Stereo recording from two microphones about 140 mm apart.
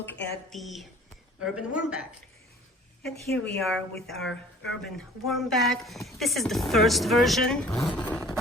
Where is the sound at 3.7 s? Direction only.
Centre (ahead or behind).